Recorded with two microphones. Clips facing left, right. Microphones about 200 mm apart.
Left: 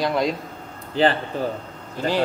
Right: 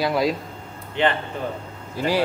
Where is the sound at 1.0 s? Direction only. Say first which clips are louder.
Left 2 dB; 35° left (ahead or behind).